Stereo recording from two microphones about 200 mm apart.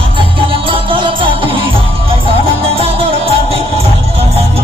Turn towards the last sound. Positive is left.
turn(degrees=-30)  # may be behind; listen again after turning